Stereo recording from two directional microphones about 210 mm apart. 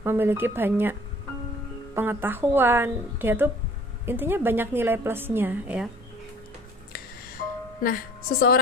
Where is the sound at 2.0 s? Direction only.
10° right (ahead or behind).